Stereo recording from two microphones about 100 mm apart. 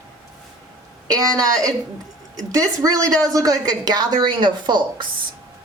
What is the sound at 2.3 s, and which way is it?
A woman's voice, 35° right (ahead or behind).